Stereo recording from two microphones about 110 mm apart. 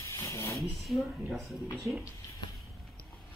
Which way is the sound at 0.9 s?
Centre (ahead or behind).